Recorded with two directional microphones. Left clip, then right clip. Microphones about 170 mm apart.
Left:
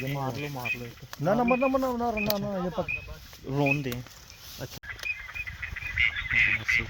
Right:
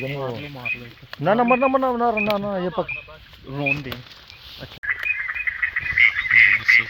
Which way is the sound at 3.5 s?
75° left (ahead or behind).